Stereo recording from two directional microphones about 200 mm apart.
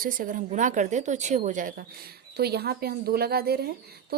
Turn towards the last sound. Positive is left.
turn(degrees=-50)  # may be behind; listen again after turning